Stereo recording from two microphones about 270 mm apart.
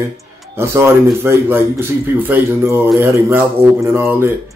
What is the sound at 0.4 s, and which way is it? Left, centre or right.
Speech, centre.